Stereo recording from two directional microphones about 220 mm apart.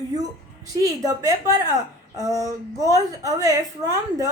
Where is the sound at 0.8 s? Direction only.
15° right (ahead or behind).